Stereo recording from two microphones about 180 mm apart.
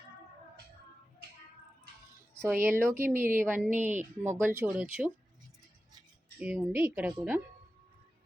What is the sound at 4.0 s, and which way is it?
Speech, 40° right (ahead or behind).